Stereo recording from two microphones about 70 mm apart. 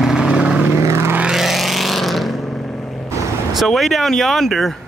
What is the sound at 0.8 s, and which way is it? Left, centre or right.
Vehicle, right.